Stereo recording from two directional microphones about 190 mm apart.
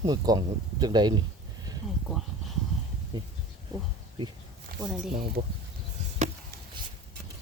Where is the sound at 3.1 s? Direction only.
25° right (ahead or behind).